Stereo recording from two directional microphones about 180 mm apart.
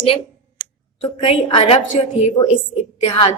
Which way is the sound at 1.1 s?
30° left (ahead or behind).